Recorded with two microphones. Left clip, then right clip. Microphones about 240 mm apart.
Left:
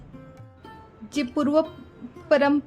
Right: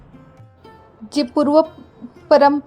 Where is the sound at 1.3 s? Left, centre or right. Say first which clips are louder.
Right 8 dB; centre.